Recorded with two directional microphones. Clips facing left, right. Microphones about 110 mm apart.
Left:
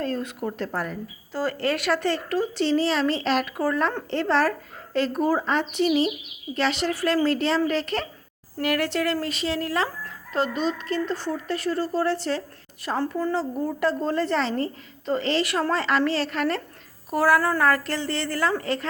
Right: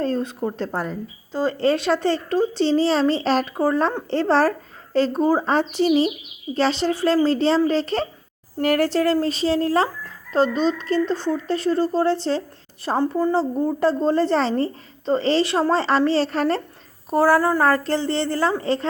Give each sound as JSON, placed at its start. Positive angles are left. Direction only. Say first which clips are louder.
{"t": 0.0, "sound": "a woman's voice", "louder": "right 5 dB", "side_deg": -30}
{"t": 13.3, "sound": "a woman's voice", "louder": "right 5 dB", "side_deg": -30}